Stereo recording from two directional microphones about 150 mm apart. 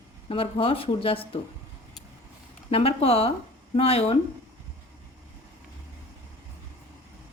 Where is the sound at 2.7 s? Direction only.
40° left (ahead or behind).